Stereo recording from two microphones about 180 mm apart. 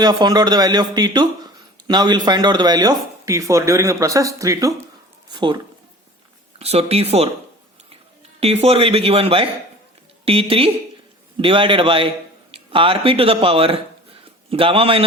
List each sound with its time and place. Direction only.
0.0 s speech: 20° right (ahead or behind)
6.6 s speech: 35° right (ahead or behind)
8.4 s a man's voice: 35° right (ahead or behind)